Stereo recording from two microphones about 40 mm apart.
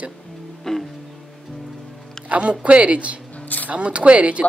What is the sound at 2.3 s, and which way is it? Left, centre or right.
A woman's voice, right.